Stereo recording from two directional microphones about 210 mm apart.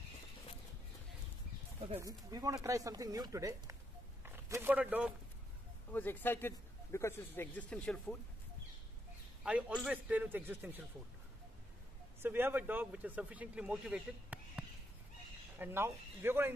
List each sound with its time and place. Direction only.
2.0 s speech: 15° right (ahead or behind)
5.9 s a man's voice: 10° left (ahead or behind)
9.4 s speech: 5° right (ahead or behind)
12.2 s speech: 10° right (ahead or behind)
15.6 s speech: 10° right (ahead or behind)